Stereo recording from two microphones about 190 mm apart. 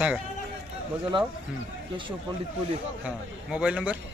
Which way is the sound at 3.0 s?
5° right (ahead or behind).